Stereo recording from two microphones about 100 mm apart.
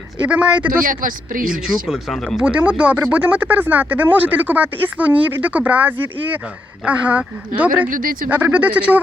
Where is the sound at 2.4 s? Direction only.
15° right (ahead or behind).